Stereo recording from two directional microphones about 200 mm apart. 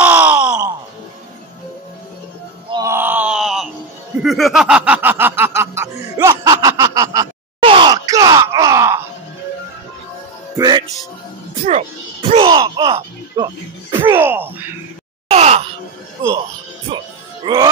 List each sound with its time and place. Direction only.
0.0 s groan: 10° right (ahead or behind)
2.7 s groan: 15° right (ahead or behind)
4.2 s a sound: centre (ahead or behind); by 9.0 s 15° right (ahead or behind)
10.6 s music: 20° right (ahead or behind)
11.6 s music: 30° right (ahead or behind)
13.4 s music: 15° right (ahead or behind)
14.1 s wail: 10° right (ahead or behind)
15.2 s wail: 30° right (ahead or behind)
17.4 s a sound: 25° right (ahead or behind)